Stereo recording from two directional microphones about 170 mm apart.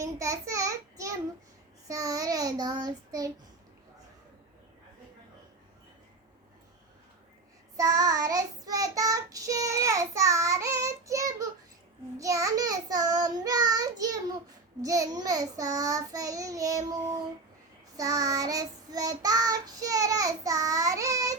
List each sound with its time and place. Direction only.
0.0 s a sound: 20° right (ahead or behind)
1.9 s child singing: 20° right (ahead or behind)
7.8 s child singing: 20° right (ahead or behind)